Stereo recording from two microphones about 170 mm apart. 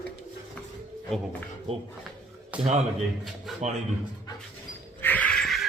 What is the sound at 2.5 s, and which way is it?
A man's voice, 10° right (ahead or behind).